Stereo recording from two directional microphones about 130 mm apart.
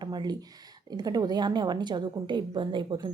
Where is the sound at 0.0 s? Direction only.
35° right (ahead or behind).